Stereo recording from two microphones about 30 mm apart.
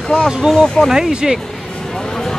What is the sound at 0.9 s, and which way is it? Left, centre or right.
Speech, centre.